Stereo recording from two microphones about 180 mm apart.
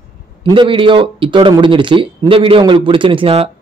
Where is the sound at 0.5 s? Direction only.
25° right (ahead or behind).